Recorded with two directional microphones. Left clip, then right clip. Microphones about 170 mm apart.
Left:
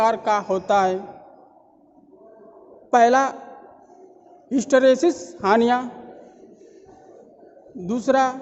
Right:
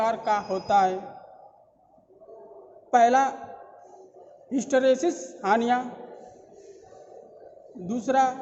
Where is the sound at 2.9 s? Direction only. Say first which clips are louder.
Left 3 dB; 50° left (ahead or behind).